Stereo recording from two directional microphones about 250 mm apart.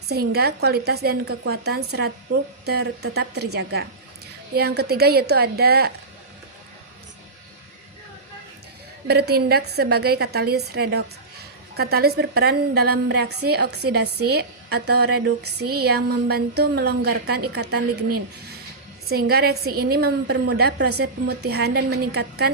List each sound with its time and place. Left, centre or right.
0.1 s a woman's voice: right
9.0 s a woman's voice: right
14.1 s a woman's voice: right
14.3 s a woman's voice: right
19.0 s a woman's voice: right